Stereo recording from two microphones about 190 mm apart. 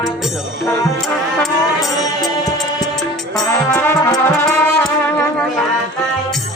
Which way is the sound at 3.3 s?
10° left (ahead or behind).